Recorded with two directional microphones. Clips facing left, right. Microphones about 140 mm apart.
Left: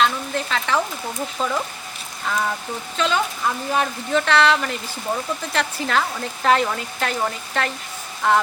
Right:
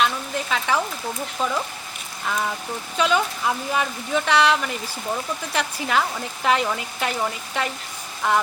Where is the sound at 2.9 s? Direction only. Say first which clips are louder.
Right 1 dB; 10° right (ahead or behind).